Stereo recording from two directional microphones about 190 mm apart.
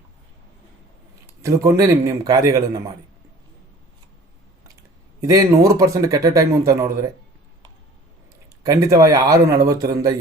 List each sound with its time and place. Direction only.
1.3 s speech: 15° right (ahead or behind)
5.2 s speech: 15° right (ahead or behind)
8.6 s speech: 15° right (ahead or behind)